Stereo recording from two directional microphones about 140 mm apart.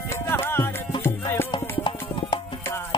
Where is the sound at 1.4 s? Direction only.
35° left (ahead or behind).